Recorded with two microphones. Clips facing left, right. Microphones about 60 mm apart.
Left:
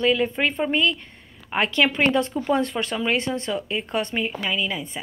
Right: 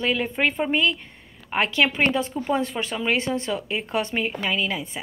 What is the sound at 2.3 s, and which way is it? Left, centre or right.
Speech, left.